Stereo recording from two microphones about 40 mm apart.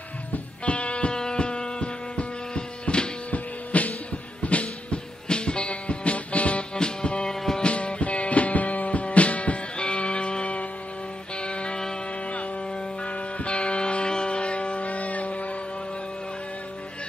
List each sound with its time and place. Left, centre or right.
0.3 s music: left
3.3 s printer: left
4.4 s music: left
6.7 s music: left
13.0 s music: left